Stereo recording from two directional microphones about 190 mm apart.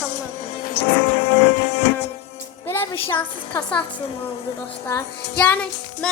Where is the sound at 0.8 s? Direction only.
30° left (ahead or behind).